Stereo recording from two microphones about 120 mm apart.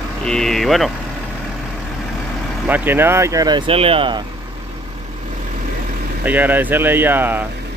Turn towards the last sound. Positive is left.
turn(degrees=-15)  # may be behind; listen again after turning